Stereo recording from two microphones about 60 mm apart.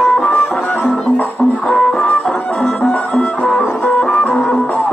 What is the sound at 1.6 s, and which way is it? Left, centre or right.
Music, centre.